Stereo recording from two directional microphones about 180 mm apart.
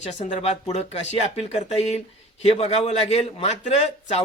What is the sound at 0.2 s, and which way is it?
Speech, 40° left (ahead or behind).